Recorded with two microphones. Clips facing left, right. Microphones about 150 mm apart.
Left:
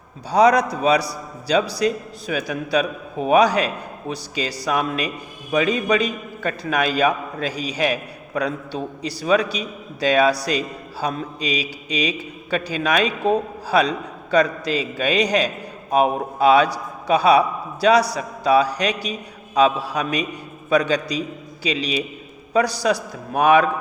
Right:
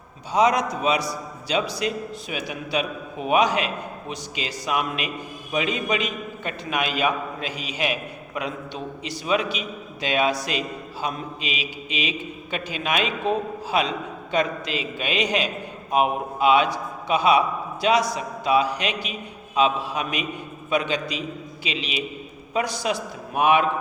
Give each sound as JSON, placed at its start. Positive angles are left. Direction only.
{"t": 0.3, "sound": "a man's voice", "side_deg": 35}